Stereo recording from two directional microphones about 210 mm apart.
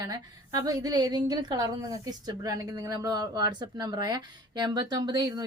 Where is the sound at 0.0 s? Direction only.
20° right (ahead or behind).